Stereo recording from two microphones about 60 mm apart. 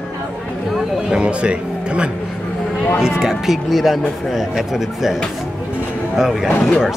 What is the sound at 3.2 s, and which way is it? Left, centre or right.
Speech, centre.